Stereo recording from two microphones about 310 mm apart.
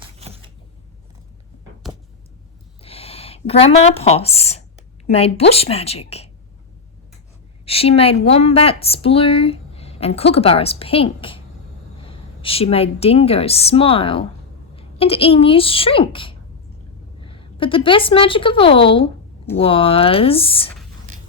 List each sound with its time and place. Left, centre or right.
1.8 s a sound: centre
2.8 s a woman's voice: centre
7.6 s a woman's voice: centre